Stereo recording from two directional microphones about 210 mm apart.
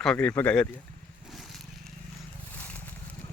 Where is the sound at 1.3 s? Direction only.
Centre (ahead or behind).